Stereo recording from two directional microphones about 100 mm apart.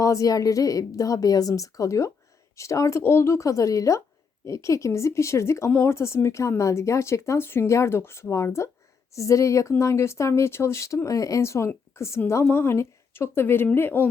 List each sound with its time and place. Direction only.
0.0 s a woman's voice: 35° left (ahead or behind)